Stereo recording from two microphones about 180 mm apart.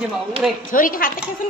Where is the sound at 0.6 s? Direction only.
50° left (ahead or behind).